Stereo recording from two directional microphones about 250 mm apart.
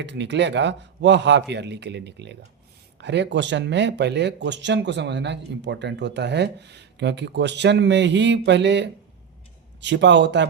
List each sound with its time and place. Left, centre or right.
0.0 s speech: right